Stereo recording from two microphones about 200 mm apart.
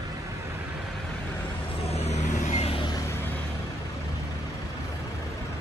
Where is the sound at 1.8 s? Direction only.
30° left (ahead or behind).